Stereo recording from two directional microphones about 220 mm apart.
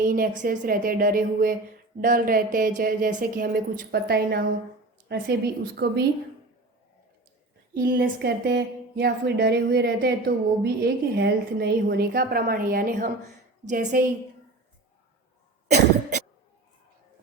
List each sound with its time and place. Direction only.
0.0 s a woman's voice: 40° right (ahead or behind)
7.7 s a woman's voice: 45° right (ahead or behind)